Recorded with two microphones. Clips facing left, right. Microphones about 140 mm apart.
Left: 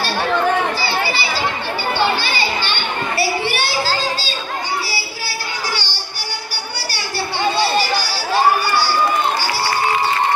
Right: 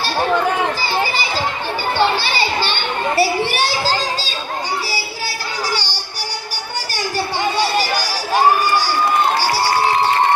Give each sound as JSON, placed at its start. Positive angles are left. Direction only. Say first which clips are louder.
{"t": 1.0, "sound": "a sound", "louder": "even", "side_deg": -40}
{"t": 2.0, "sound": "children playing", "louder": "right 2 dB", "side_deg": -35}
{"t": 7.5, "sound": "music", "louder": "even", "side_deg": -10}